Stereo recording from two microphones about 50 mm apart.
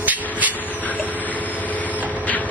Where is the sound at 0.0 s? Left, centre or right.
Right.